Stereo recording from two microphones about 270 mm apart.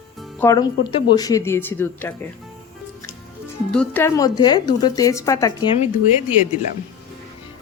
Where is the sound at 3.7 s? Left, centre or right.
Centre.